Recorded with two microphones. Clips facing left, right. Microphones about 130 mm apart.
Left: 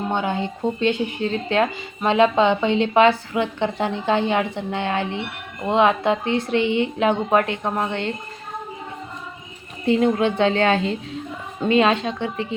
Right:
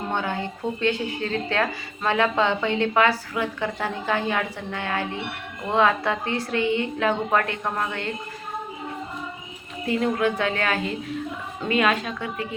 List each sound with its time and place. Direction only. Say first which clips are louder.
0.1 s speech: left 2 dB; 20° left (ahead or behind)
9.8 s speech: left 5 dB; 25° left (ahead or behind)